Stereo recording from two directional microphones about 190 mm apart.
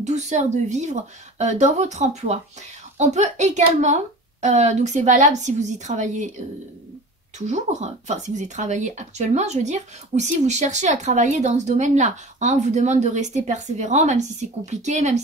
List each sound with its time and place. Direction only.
0.0 s speech: 40° right (ahead or behind)
7.3 s speech: 35° right (ahead or behind)